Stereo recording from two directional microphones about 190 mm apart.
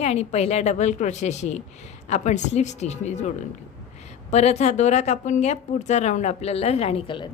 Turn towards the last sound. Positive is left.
turn(degrees=30)  # may be behind; listen again after turning